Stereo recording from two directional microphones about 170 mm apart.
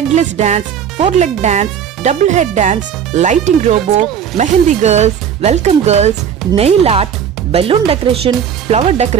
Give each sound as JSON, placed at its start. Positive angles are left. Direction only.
{"t": 0.1, "sound": "speech", "side_deg": -40}